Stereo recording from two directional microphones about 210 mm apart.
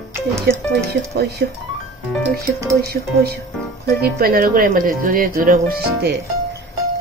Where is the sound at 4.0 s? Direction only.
45° right (ahead or behind).